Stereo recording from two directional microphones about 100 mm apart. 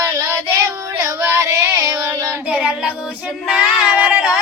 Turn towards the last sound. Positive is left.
turn(degrees=-10)  # may be behind; listen again after turning